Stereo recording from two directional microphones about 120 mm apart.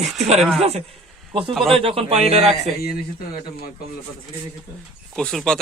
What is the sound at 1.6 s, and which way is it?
Speech, 50° right (ahead or behind).